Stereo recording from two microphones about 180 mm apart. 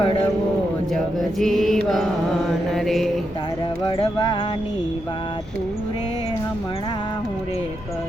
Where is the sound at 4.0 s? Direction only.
25° left (ahead or behind).